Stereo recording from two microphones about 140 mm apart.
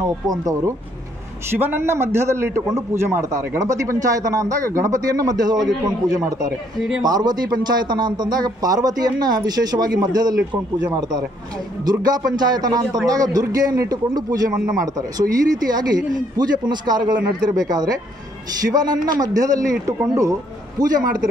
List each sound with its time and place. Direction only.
0.3 s a man's voice: 25° right (ahead or behind)